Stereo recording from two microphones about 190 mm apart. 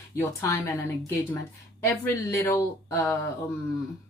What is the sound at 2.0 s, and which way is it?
Speech, 15° left (ahead or behind).